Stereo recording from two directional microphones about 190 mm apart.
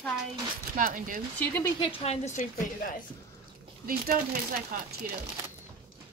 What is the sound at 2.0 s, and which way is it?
Speech, 40° left (ahead or behind).